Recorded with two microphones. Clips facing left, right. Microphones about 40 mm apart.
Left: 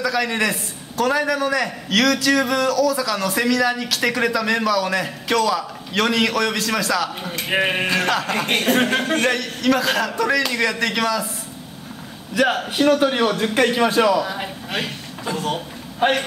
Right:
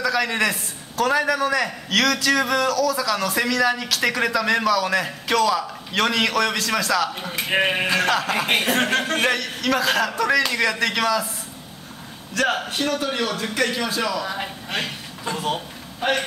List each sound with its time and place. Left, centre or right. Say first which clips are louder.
0.0 s a man's voice: left 1 dB; centre
12.6 s a man's voice: left 7 dB; centre; by 14.0 s left
14.2 s speech: left 1 dB; centre
16.0 s a man's voice: left 4 dB; left